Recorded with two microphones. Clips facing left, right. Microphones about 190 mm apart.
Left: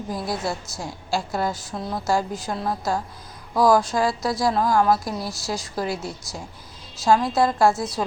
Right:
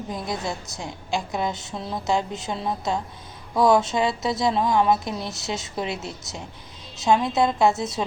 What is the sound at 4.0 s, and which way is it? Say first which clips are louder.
A woman's voice: left 1 dB; 20° right (ahead or behind).